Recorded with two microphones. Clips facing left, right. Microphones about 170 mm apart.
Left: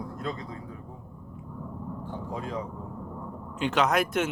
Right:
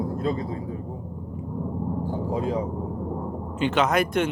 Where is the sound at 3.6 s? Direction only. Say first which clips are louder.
Right 3 dB; centre (ahead or behind).